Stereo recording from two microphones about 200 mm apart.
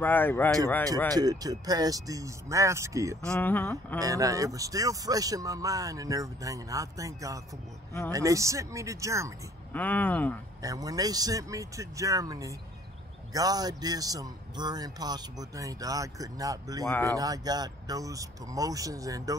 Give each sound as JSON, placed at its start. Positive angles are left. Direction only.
{"t": 0.0, "sound": "speech", "side_deg": 10}
{"t": 1.1, "sound": "speech", "side_deg": -20}
{"t": 3.3, "sound": "speech", "side_deg": 10}
{"t": 4.0, "sound": "speech", "side_deg": -15}
{"t": 9.7, "sound": "speech", "side_deg": 10}
{"t": 10.6, "sound": "speech", "side_deg": -15}
{"t": 16.8, "sound": "speech", "side_deg": 10}
{"t": 17.2, "sound": "speech", "side_deg": -20}